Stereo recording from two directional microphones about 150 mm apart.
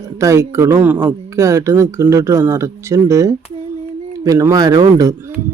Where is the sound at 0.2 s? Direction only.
20° right (ahead or behind).